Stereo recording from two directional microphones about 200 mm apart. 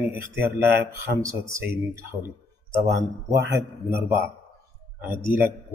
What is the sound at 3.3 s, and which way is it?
Speech, 15° right (ahead or behind).